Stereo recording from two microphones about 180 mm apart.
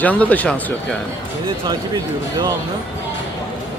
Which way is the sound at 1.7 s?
20° right (ahead or behind).